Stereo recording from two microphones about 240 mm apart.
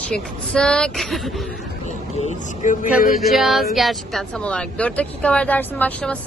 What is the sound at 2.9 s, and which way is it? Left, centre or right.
Speech, centre.